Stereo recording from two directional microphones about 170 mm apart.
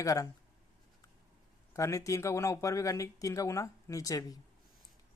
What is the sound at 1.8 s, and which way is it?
Speech, 20° left (ahead or behind).